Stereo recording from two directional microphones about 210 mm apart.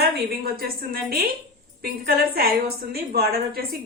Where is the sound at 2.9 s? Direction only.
45° right (ahead or behind).